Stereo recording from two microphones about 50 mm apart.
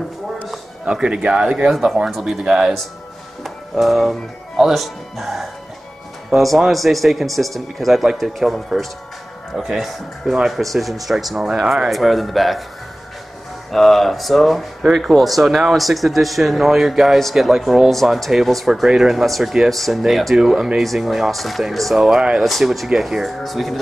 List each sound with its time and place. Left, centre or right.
0.9 s speech: centre
1.7 s speech: centre
2.4 s speech: centre
3.4 s speech: centre
13.7 s speech: centre
22.4 s speech: centre